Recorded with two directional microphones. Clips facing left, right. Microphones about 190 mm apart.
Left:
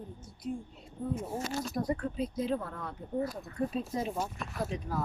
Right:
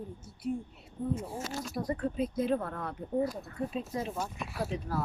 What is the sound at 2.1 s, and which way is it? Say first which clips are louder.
Speech: right 2 dB; 50° right (ahead or behind).